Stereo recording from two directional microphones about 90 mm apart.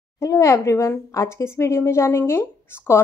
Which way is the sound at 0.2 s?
35° left (ahead or behind).